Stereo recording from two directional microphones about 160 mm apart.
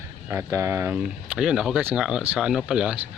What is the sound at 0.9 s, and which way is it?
Speech, 5° right (ahead or behind).